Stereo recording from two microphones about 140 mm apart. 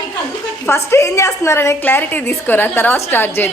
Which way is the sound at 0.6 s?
20° left (ahead or behind).